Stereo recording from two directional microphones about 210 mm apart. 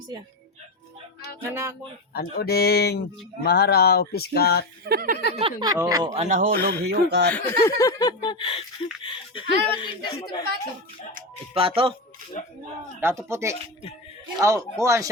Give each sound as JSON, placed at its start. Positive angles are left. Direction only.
{"t": 1.4, "sound": "speech", "side_deg": -10}
{"t": 2.1, "sound": "a sound", "side_deg": 45}
{"t": 4.9, "sound": "speech", "side_deg": -45}
{"t": 5.4, "sound": "speech", "side_deg": -20}
{"t": 6.1, "sound": "a man's voice", "side_deg": -35}
{"t": 7.3, "sound": "a sound", "side_deg": 15}
{"t": 11.8, "sound": "a man's voice", "side_deg": -25}
{"t": 13.0, "sound": "speech", "side_deg": -10}